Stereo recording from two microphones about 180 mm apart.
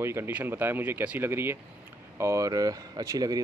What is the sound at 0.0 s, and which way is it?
Speech, 15° right (ahead or behind).